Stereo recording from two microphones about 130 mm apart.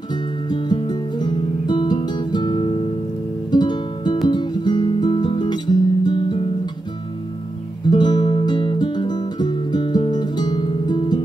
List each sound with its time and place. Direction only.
0.1 s music: 35° left (ahead or behind)
4.3 s guitar: 35° left (ahead or behind)
7.9 s music: 35° left (ahead or behind)